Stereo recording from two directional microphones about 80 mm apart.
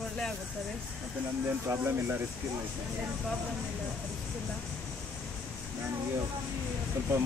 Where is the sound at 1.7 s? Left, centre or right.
Right.